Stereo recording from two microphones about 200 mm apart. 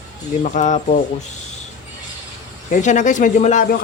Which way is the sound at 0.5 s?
40° left (ahead or behind).